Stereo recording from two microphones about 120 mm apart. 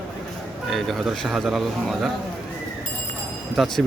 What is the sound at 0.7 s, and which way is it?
A man's voice, centre (ahead or behind).